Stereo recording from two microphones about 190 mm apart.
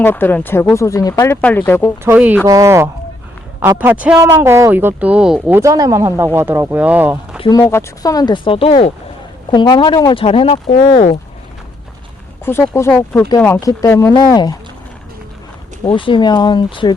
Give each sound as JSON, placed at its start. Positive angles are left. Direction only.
{"t": 0.0, "sound": "speech", "side_deg": 10}
{"t": 2.0, "sound": "a man's voice", "side_deg": -10}
{"t": 7.4, "sound": "speech", "side_deg": 15}
{"t": 10.7, "sound": "speech", "side_deg": 45}
{"t": 12.5, "sound": "speech", "side_deg": 10}
{"t": 15.8, "sound": "speech", "side_deg": 25}